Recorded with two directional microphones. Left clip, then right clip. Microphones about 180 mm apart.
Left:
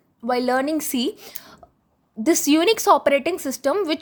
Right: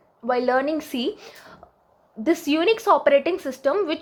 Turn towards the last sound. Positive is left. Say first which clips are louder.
# left 1 dB
turn(degrees=35)  # may be behind; listen again after turning